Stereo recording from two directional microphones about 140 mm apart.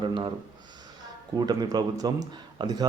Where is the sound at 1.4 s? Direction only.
30° right (ahead or behind).